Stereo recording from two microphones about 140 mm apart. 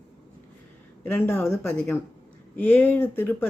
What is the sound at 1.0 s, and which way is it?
Speech, 15° left (ahead or behind).